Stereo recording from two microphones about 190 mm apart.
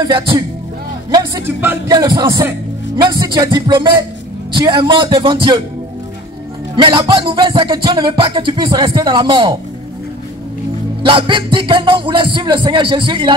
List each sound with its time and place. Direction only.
0.0 s music: 25° right (ahead or behind)
1.4 s speech: 10° right (ahead or behind)
2.0 s music: 25° right (ahead or behind)
6.8 s music: 25° right (ahead or behind)
11.0 s music: 25° right (ahead or behind)